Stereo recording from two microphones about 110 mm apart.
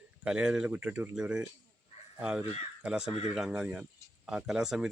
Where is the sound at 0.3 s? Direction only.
10° right (ahead or behind).